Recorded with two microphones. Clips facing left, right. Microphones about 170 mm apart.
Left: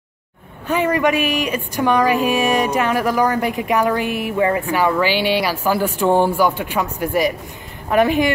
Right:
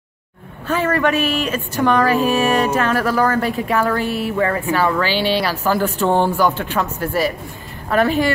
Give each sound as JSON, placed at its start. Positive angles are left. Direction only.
{"t": 0.7, "sound": "speech", "side_deg": 15}